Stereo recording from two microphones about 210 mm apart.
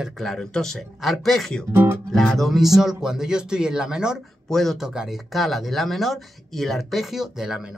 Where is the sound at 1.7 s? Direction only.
10° right (ahead or behind).